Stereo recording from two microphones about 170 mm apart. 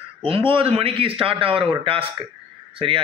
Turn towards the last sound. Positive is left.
turn(degrees=-30)  # may be behind; listen again after turning